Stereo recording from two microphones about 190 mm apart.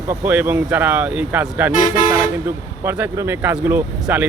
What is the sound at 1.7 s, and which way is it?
Speech, 40° left (ahead or behind).